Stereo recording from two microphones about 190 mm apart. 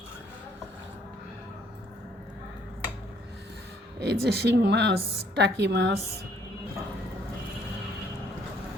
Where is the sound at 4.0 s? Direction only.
60° right (ahead or behind).